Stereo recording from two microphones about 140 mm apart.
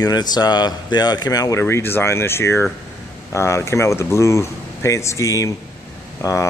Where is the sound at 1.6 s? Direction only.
15° left (ahead or behind).